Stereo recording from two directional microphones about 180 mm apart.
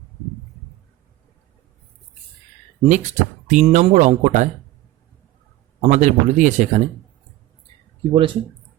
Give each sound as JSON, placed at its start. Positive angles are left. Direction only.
{"t": 2.8, "sound": "speech", "side_deg": -40}
{"t": 5.8, "sound": "speech", "side_deg": -40}
{"t": 8.1, "sound": "speech", "side_deg": -30}